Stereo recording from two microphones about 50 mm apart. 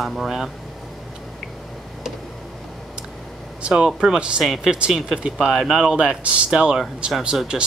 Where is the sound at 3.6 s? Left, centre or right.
Centre.